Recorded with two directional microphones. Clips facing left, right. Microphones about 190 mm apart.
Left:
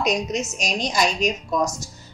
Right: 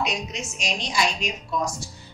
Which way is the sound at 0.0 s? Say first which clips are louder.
Left 6 dB; 40° left (ahead or behind).